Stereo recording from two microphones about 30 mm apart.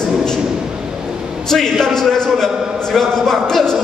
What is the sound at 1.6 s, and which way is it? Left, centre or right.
A man's voice, centre.